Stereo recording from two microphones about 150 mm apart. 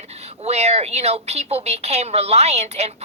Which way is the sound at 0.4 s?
45° right (ahead or behind).